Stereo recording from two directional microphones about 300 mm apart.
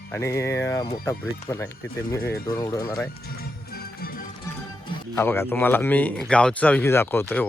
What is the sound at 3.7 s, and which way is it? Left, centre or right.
Music, left.